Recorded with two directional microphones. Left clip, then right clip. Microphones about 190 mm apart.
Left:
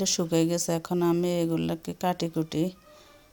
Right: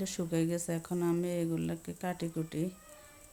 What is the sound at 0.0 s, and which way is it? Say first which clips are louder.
Speech: left 9 dB; 40° left (ahead or behind).